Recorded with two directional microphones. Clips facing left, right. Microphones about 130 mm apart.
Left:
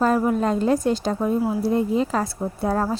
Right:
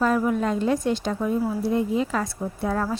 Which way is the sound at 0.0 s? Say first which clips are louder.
Left 2 dB; 40° left (ahead or behind).